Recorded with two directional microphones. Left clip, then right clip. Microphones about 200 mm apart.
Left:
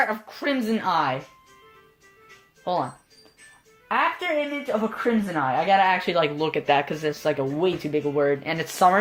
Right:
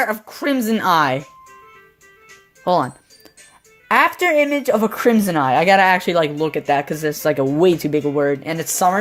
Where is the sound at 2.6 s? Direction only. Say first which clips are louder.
Right 8 dB; 50° right (ahead or behind).